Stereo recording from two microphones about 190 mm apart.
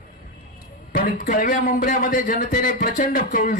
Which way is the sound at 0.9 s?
45° left (ahead or behind).